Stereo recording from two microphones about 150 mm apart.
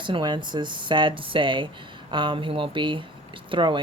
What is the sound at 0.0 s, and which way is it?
Speech, 30° right (ahead or behind).